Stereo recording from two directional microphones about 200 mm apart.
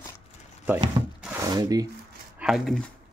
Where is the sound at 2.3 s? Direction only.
Centre (ahead or behind).